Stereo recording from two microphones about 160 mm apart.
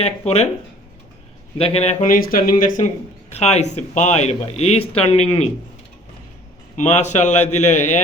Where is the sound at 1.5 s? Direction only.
40° left (ahead or behind).